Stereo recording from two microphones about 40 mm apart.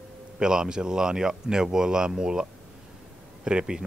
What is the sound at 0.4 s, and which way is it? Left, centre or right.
Speech, centre.